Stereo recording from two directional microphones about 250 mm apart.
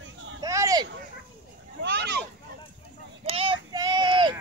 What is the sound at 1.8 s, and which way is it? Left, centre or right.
Speech, right.